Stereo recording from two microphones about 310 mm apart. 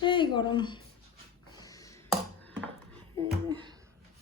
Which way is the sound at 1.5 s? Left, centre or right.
Centre.